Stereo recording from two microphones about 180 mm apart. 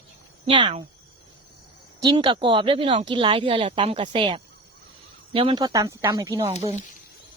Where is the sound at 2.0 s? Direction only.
25° right (ahead or behind).